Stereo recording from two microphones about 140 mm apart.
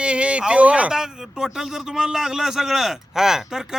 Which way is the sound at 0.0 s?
10° right (ahead or behind).